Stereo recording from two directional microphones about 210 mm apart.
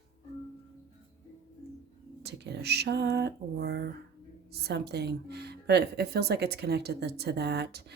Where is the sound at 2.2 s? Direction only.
50° right (ahead or behind).